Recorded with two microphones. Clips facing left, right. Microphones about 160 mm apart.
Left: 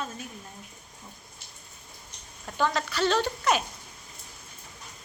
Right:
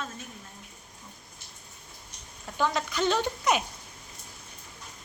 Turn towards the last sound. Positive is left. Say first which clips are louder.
# left 1 dB
turn(degrees=-10)  # may be behind; listen again after turning